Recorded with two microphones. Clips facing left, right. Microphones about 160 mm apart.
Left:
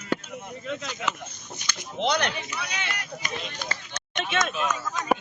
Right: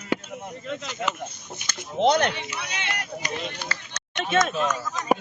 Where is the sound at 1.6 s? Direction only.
45° right (ahead or behind).